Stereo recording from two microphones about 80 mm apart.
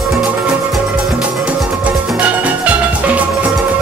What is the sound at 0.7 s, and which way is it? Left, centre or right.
Music, centre.